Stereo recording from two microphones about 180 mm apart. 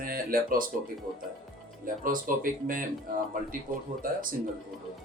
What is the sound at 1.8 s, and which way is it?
Speech, 50° right (ahead or behind).